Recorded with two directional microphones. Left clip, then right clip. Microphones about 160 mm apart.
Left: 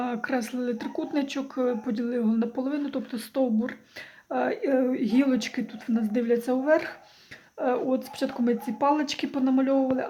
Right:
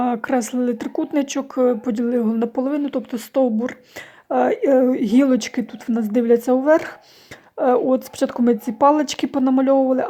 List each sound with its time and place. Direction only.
0.0 s a woman's voice: 40° right (ahead or behind)